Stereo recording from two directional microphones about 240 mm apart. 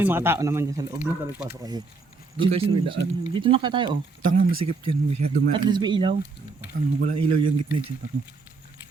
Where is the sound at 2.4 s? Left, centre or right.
Right.